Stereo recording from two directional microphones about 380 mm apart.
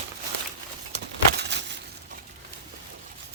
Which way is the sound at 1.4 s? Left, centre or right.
Right.